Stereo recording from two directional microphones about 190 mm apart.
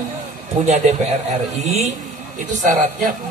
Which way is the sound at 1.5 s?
35° right (ahead or behind).